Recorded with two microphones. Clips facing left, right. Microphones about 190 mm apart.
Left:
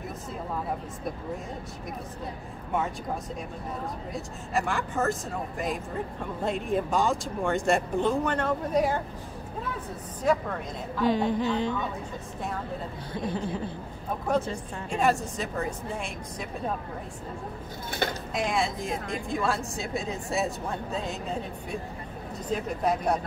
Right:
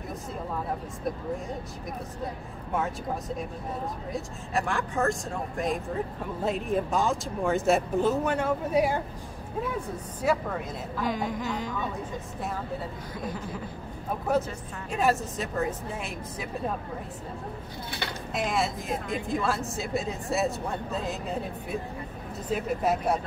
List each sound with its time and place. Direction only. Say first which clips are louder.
4.1 s speech: left 1 dB; centre (ahead or behind)
6.4 s speech: even; centre (ahead or behind)
10.2 s speech: left 1 dB; 10° right (ahead or behind)
11.1 s speech: left 6 dB; 30° left (ahead or behind)
13.1 s speech: left 7 dB; 30° left (ahead or behind)
14.3 s speech: even; 5° right (ahead or behind)
18.3 s speech: right 3 dB; centre (ahead or behind)